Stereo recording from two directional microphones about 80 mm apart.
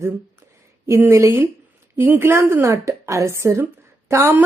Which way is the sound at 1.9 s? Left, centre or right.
Right.